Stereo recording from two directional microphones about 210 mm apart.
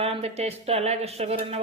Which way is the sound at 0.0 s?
30° right (ahead or behind).